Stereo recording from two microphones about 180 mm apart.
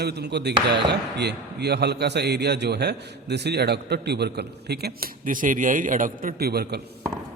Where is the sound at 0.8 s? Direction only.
70° right (ahead or behind).